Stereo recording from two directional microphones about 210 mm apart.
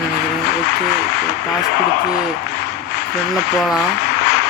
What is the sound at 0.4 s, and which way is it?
Speech, 50° left (ahead or behind).